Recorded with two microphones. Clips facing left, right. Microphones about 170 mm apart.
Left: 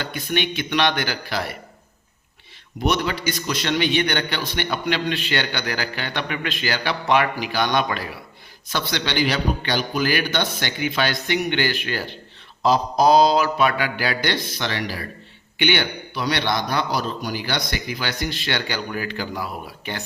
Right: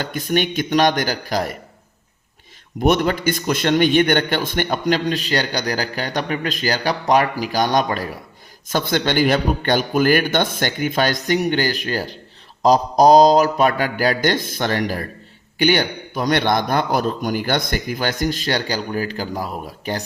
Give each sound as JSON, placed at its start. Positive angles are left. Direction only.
{"t": 0.0, "sound": "a man's voice", "side_deg": -45}
{"t": 2.8, "sound": "a man's voice", "side_deg": -50}